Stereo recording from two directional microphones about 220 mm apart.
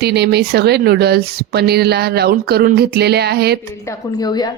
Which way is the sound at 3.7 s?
15° left (ahead or behind).